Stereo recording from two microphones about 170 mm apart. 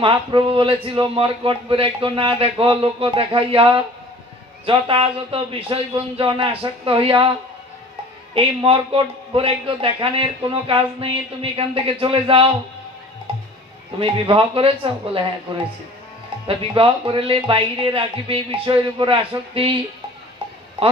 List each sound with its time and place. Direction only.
0.0 s speech: 30° right (ahead or behind)
8.4 s speech: 35° right (ahead or behind)
13.9 s speech: 30° right (ahead or behind)